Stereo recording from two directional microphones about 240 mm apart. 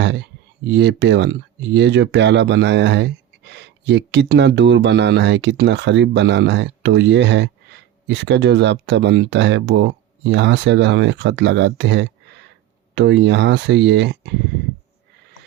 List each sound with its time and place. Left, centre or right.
0.0 s speech: right